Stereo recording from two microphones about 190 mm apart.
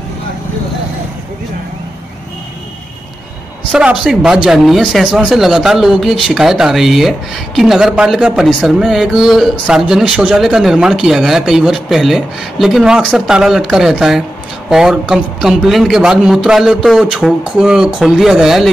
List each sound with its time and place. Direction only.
3.7 s a man's voice: 5° right (ahead or behind)